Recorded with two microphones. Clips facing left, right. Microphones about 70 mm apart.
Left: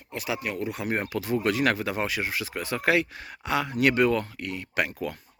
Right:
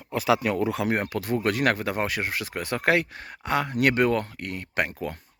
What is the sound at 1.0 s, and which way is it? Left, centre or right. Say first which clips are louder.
Speech: even; right.